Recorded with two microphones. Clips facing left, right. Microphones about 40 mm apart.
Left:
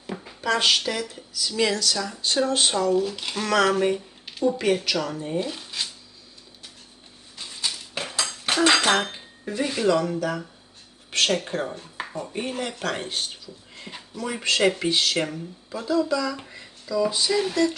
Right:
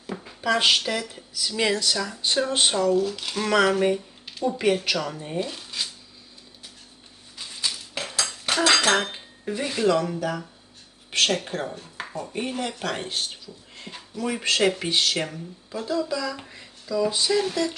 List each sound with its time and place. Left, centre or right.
0.1 s a sound: centre
0.4 s speech: centre
1.5 s speech: centre
2.9 s speech: left
3.4 s speech: centre
3.9 s a sound: centre
4.7 s speech: centre
7.6 s dishes: centre
8.6 s cutlery: centre
9.0 s speech: centre
11.8 s chopping: centre
12.3 s speech: centre